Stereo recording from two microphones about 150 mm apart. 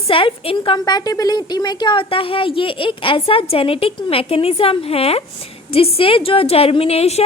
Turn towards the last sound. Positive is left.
turn(degrees=40)  # may be behind; listen again after turning